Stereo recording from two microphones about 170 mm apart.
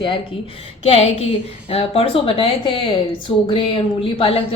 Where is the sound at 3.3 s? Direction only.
10° left (ahead or behind).